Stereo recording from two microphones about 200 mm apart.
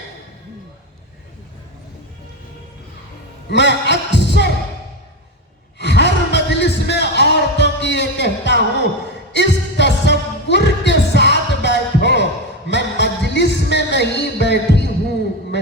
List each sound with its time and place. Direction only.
3.5 s heart sounds: 60° left (ahead or behind)
5.8 s music: 60° left (ahead or behind)